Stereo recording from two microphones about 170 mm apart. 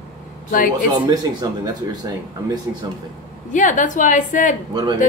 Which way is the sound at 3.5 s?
50° left (ahead or behind).